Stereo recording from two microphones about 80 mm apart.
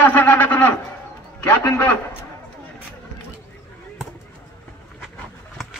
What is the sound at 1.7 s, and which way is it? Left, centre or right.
Speech, centre.